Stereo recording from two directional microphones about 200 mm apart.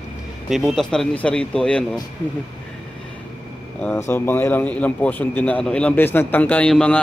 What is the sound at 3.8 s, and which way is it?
Speech, 10° left (ahead or behind).